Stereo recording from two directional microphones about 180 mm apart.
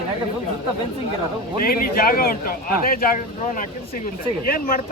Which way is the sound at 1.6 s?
55° left (ahead or behind).